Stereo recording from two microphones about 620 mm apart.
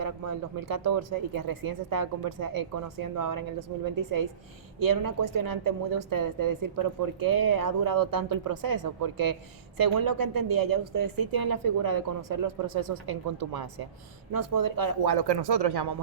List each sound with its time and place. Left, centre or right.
0.0 s a woman's voice: right